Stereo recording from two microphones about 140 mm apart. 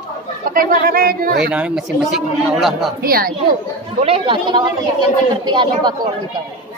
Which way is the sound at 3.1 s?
90° right.